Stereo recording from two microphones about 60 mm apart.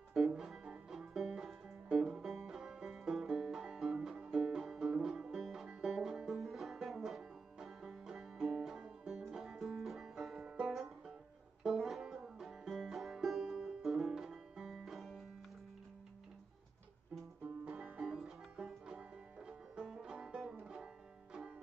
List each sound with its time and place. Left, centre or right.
0.1 s music: centre
11.6 s banjo: centre
17.6 s music: right
20.6 s banjo: centre